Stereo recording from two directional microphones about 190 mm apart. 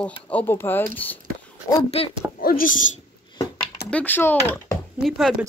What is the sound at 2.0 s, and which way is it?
Speech, 30° left (ahead or behind).